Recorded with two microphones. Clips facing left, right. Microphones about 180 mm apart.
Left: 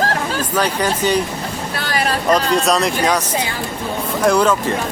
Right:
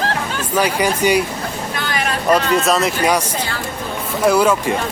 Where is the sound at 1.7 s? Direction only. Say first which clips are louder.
Left 3 dB; 35° left (ahead or behind).